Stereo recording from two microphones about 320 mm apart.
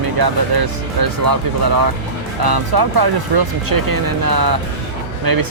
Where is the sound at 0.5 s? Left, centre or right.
Right.